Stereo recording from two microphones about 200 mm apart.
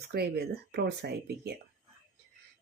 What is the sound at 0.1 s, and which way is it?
Speech, 55° right (ahead or behind).